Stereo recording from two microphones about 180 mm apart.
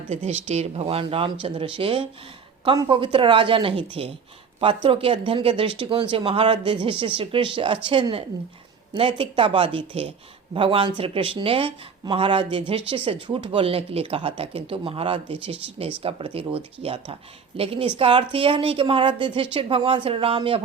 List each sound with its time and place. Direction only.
0.1 s a woman's voice: 40° right (ahead or behind)